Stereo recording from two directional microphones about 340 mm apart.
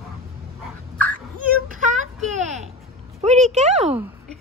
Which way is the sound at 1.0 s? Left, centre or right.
Right.